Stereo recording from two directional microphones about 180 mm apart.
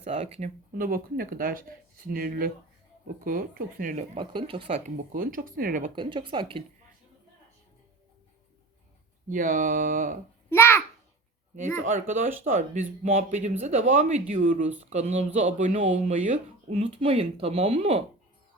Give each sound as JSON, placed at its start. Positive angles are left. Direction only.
{"t": 0.0, "sound": "speech", "side_deg": -35}
{"t": 0.7, "sound": "speech", "side_deg": -50}
{"t": 5.1, "sound": "speech", "side_deg": -50}
{"t": 5.9, "sound": "speech", "side_deg": -25}
{"t": 9.3, "sound": "speech", "side_deg": -50}
{"t": 10.5, "sound": "a child's voice", "side_deg": 15}
{"t": 11.8, "sound": "speech", "side_deg": -45}